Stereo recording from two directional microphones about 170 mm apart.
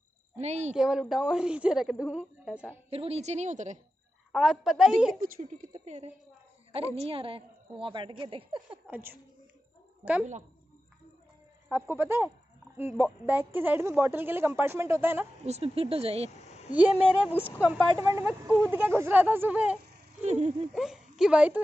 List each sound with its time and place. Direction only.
0.4 s a woman's voice: 40° right (ahead or behind)
0.7 s a woman's voice: 5° right (ahead or behind)
2.9 s a woman's voice: 35° right (ahead or behind)
4.3 s a woman's voice: centre (ahead or behind)
5.2 s a woman's voice: 50° right (ahead or behind)
7.0 s a woman's voice: 30° right (ahead or behind)
8.6 s a woman's voice: 10° right (ahead or behind)
11.7 s a woman's voice: 15° right (ahead or behind)
15.4 s a woman's voice: 35° right (ahead or behind)
16.3 s a sound: 40° left (ahead or behind)
16.7 s a woman's voice: 5° right (ahead or behind)
17.9 s a woman's voice: 15° right (ahead or behind)
20.2 s speech: 40° right (ahead or behind)
20.7 s speech: 5° right (ahead or behind)